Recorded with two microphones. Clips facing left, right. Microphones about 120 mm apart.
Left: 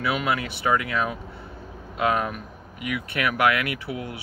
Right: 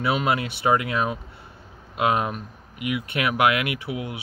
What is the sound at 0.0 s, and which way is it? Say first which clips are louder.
Speech: right 2 dB; 25° right (ahead or behind).